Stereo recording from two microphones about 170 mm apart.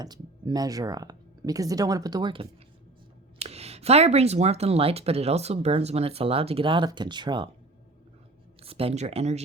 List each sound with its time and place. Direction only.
0.0 s speech: 25° right (ahead or behind)
8.6 s speech: 35° right (ahead or behind)